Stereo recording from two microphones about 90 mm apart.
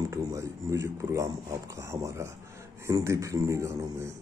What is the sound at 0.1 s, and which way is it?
Speech, 35° right (ahead or behind).